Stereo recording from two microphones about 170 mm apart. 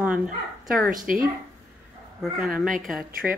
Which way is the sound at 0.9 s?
55° right (ahead or behind).